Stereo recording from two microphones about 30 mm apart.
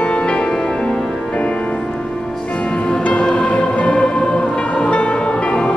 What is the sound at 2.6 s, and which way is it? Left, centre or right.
Music, left.